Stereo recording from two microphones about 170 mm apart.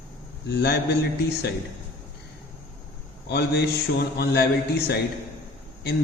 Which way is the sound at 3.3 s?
75° left (ahead or behind).